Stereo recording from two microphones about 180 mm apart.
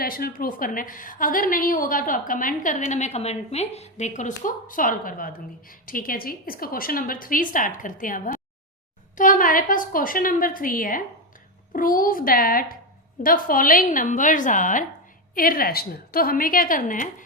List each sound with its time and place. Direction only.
0.0 s a woman's voice: 55° left (ahead or behind)